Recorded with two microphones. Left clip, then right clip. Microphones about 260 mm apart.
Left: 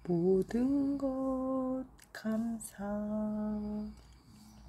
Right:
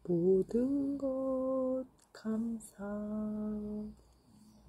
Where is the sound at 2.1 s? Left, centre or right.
Left.